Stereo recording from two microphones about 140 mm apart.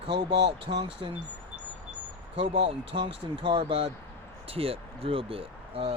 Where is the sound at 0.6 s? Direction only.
35° right (ahead or behind).